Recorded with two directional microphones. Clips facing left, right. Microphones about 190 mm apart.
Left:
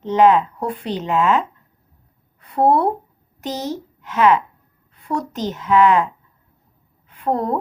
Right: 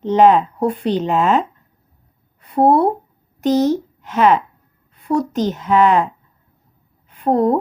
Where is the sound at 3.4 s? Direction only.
50° right (ahead or behind).